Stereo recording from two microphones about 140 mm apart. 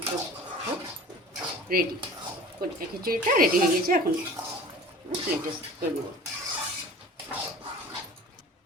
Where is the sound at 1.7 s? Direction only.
90° right.